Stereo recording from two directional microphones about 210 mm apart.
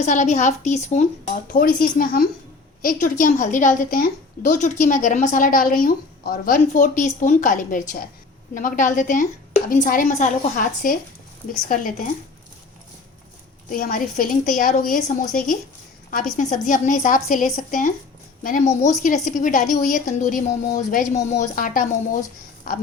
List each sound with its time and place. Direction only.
0.0 s a woman's voice: 35° left (ahead or behind)
1.5 s a woman's voice: 45° left (ahead or behind)
13.7 s a woman's voice: 40° left (ahead or behind)